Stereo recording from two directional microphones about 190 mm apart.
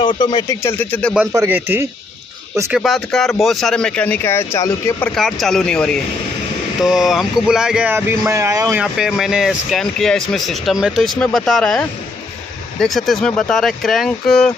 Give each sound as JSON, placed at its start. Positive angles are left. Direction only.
{"t": 0.0, "sound": "speech", "side_deg": 25}
{"t": 1.3, "sound": "speech", "side_deg": -15}
{"t": 2.8, "sound": "speech", "side_deg": 0}
{"t": 5.1, "sound": "speech", "side_deg": 0}
{"t": 8.8, "sound": "speech", "side_deg": 0}